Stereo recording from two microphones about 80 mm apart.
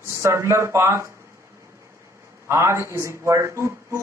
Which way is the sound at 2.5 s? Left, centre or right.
Right.